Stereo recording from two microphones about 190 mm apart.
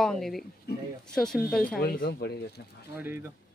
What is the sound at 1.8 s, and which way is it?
Speech, 50° left (ahead or behind).